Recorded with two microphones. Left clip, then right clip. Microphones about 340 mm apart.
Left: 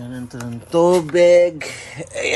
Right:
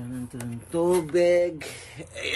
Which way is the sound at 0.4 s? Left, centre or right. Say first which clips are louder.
Left 11 dB; centre.